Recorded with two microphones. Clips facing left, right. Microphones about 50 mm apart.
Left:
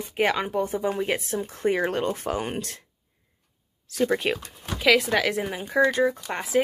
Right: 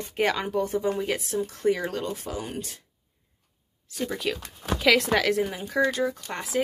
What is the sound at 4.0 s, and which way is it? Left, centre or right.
Speech, left.